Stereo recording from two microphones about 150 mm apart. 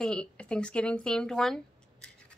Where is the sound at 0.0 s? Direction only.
5° left (ahead or behind).